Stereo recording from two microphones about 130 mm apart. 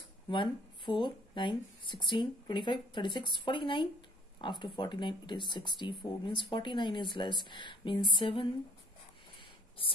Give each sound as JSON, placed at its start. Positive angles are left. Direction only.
{"t": 0.3, "sound": "speech", "side_deg": 40}